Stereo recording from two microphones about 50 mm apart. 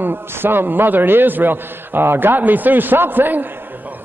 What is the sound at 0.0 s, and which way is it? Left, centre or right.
A man's voice, right.